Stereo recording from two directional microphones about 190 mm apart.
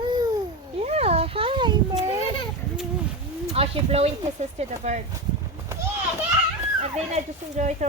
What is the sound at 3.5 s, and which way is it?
Speech, 30° right (ahead or behind).